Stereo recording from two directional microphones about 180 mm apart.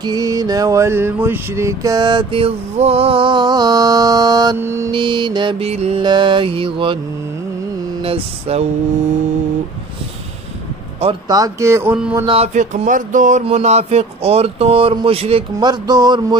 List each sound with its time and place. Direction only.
0.0 s mantra: 20° right (ahead or behind)
4.9 s mantra: 25° right (ahead or behind)
8.0 s speech: 35° right (ahead or behind)
11.0 s speech: 25° right (ahead or behind); by 12.3 s 10° right (ahead or behind)
12.3 s speech: 35° right (ahead or behind)